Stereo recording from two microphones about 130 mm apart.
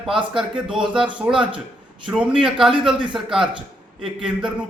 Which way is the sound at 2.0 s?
5° right (ahead or behind).